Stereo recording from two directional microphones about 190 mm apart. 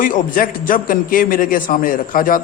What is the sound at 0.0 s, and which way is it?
A man's voice, 45° left (ahead or behind).